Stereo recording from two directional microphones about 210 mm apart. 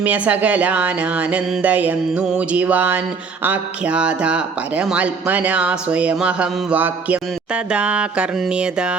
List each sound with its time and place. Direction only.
0.0 s speech: 5° right (ahead or behind)